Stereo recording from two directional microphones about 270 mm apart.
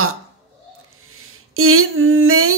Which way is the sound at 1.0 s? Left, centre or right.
Right.